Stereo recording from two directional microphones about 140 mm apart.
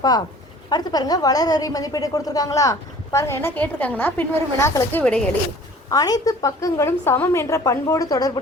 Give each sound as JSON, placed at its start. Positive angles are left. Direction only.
{"t": 0.7, "sound": "a woman's voice", "side_deg": 30}
{"t": 5.9, "sound": "a woman's voice", "side_deg": 25}